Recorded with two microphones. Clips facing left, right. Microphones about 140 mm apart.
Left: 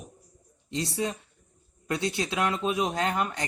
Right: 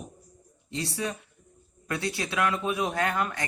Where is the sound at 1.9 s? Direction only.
20° left (ahead or behind).